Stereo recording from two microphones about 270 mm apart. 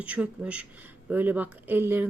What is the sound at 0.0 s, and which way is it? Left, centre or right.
Speech, centre.